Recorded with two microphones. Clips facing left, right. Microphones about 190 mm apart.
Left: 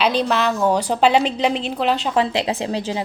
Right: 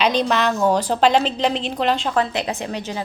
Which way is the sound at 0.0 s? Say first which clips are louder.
Even; 5° left (ahead or behind).